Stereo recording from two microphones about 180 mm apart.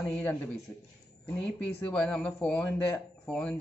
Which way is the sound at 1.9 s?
5° left (ahead or behind).